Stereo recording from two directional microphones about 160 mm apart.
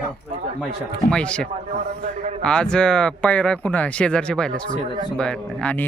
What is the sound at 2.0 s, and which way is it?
Speech, 50° right (ahead or behind).